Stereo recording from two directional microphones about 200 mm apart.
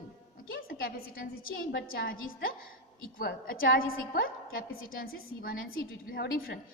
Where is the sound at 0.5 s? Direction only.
45° left (ahead or behind).